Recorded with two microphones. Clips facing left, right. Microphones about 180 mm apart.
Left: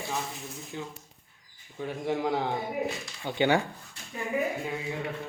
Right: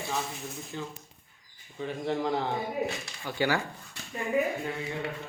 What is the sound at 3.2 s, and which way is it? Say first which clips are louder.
Speech: left 4 dB; 20° left (ahead or behind).